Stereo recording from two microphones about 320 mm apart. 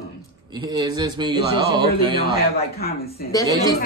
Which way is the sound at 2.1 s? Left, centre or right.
Left.